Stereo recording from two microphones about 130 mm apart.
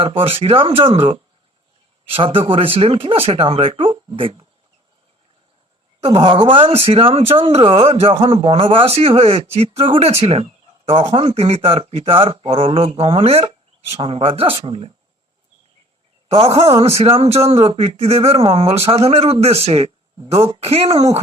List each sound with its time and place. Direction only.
0.0 s speech: 45° right (ahead or behind)
6.1 s speech: 35° right (ahead or behind)
16.3 s speech: 50° right (ahead or behind)